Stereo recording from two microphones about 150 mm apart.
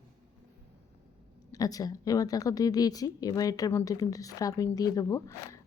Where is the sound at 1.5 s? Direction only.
25° left (ahead or behind).